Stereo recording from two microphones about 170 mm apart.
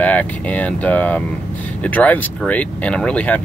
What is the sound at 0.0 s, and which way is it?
Speech, 10° left (ahead or behind).